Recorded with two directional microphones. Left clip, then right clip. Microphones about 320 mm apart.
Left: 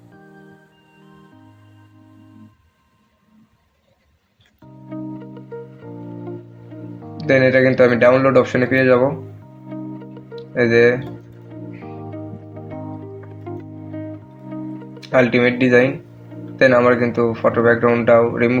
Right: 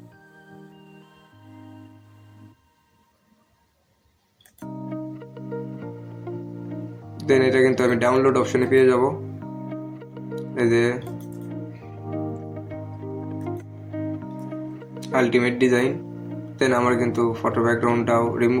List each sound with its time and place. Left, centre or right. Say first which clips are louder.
4.6 s music: even; centre
7.2 s speech: left 4 dB; right
9.4 s music: even; centre
10.5 s speech: left 7 dB; right
11.4 s music: left 2 dB; centre
15.0 s speech: left 5 dB; right